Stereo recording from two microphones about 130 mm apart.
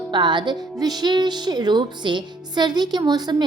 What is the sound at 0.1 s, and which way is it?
Speech, 35° right (ahead or behind).